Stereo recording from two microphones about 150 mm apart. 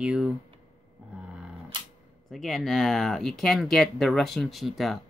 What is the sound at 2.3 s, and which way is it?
Speech, centre (ahead or behind).